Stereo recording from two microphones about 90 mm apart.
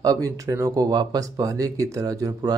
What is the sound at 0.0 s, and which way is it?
Speech, 40° right (ahead or behind).